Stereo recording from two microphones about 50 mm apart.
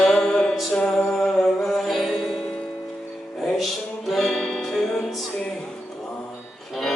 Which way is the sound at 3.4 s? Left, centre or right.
Centre.